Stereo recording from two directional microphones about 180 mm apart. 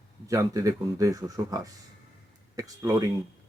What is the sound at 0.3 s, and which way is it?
Speech, 20° right (ahead or behind).